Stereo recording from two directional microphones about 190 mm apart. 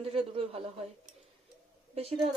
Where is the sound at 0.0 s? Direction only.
30° right (ahead or behind).